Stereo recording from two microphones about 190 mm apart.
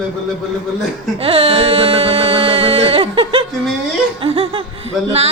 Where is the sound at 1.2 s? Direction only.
30° right (ahead or behind).